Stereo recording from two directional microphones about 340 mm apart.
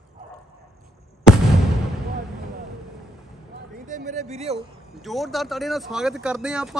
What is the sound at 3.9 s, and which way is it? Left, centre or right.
Speech, right.